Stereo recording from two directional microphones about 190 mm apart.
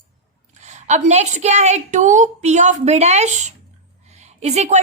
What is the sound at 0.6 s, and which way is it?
A woman's voice, 40° right (ahead or behind).